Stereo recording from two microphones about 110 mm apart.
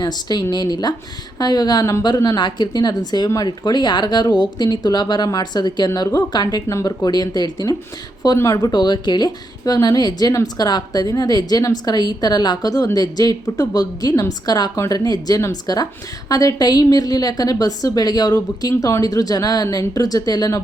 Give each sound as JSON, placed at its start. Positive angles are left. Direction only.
{"t": 0.0, "sound": "a woman's voice", "side_deg": 40}